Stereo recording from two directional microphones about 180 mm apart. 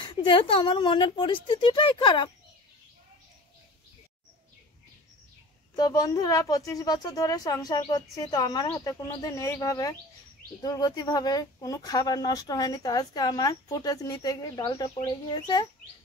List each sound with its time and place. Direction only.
0.0 s speech: 25° left (ahead or behind)
5.8 s speech: 20° left (ahead or behind)